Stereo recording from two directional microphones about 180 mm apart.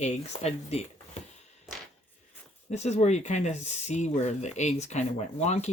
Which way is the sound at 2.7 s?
35° left (ahead or behind).